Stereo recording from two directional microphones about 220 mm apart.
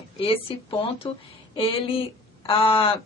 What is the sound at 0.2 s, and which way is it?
A woman's voice, 25° left (ahead or behind).